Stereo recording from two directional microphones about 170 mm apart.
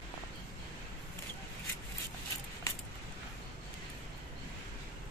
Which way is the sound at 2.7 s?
20° left (ahead or behind).